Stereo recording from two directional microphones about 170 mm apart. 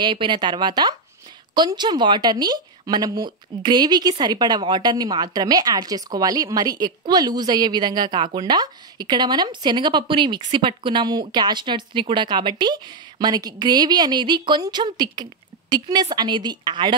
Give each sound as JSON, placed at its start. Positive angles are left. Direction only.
{"t": 0.0, "sound": "speech", "side_deg": -25}